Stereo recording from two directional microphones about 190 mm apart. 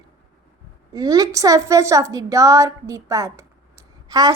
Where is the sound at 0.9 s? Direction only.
20° right (ahead or behind).